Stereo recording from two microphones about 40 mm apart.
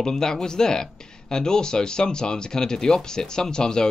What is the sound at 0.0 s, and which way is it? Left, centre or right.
A man's voice, centre.